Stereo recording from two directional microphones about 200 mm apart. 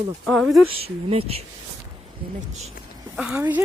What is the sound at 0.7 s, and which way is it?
Speech, 30° right (ahead or behind).